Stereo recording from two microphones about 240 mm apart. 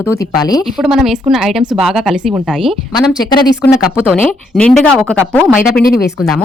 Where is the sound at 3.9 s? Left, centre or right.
Centre.